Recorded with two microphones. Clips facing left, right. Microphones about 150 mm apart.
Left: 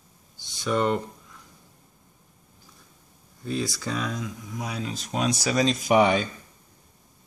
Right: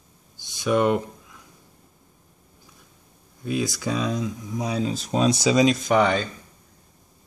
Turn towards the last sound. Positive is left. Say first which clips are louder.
# even
turn(degrees=15)  # may be behind; listen again after turning